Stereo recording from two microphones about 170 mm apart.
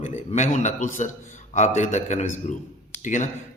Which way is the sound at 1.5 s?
45° left (ahead or behind).